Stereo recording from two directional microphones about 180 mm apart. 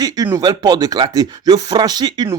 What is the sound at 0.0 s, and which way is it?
Speech, 20° right (ahead or behind).